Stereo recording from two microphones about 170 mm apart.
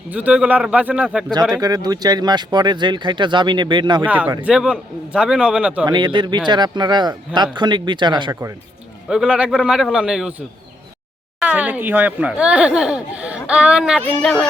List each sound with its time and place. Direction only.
0.1 s speech: 10° right (ahead or behind)
1.5 s speech: 20° right (ahead or behind)
4.0 s a man's voice: 10° right (ahead or behind)
5.8 s speech: 25° right (ahead or behind)
9.0 s a man's voice: 5° right (ahead or behind)